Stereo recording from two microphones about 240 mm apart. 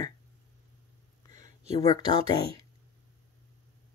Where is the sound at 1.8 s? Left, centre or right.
Centre.